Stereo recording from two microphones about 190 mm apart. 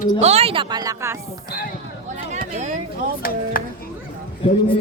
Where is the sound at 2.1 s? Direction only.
40° right (ahead or behind).